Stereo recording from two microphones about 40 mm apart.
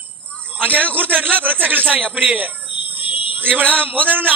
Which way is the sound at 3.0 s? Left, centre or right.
Right.